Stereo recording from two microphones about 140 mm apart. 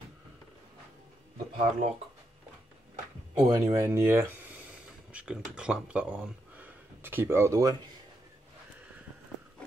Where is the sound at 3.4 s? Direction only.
25° right (ahead or behind).